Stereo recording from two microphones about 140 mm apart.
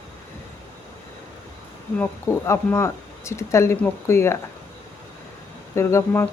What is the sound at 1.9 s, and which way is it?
Speech, 15° left (ahead or behind).